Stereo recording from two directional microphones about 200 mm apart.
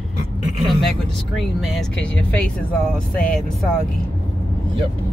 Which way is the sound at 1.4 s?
Centre (ahead or behind).